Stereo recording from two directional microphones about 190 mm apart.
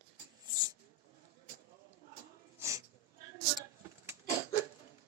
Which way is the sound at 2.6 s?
15° right (ahead or behind).